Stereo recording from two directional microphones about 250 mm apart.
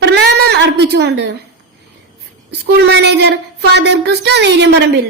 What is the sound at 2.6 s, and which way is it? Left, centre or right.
A woman's voice, right.